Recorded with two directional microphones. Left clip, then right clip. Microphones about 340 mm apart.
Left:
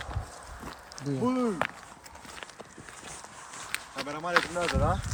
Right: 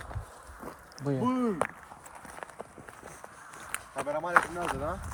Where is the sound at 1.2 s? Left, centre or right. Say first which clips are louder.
Left 2 dB; right.